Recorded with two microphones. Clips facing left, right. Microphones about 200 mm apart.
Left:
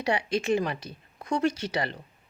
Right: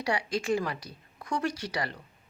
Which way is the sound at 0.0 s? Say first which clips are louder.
Left 3 dB; 25° left (ahead or behind).